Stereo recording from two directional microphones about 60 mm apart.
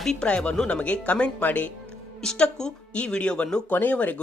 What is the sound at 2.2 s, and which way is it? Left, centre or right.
Speech, centre.